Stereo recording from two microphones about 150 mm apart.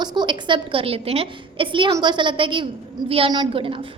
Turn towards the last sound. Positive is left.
turn(degrees=-35)  # may be behind; listen again after turning